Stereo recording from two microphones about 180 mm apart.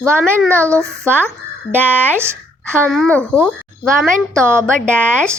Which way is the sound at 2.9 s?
5° left (ahead or behind).